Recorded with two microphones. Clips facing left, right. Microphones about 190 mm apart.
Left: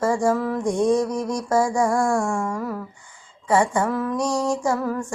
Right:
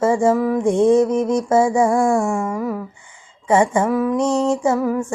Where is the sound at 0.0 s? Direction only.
20° right (ahead or behind).